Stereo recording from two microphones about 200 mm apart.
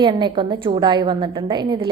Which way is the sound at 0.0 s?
20° right (ahead or behind).